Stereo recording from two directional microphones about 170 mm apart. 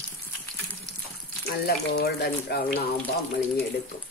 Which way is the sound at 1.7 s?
65° left (ahead or behind).